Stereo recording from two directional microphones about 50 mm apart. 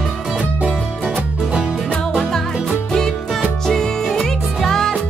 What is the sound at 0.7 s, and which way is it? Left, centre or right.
Music, centre.